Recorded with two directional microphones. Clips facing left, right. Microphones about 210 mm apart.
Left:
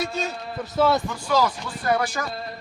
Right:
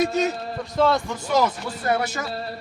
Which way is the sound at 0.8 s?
5° left (ahead or behind).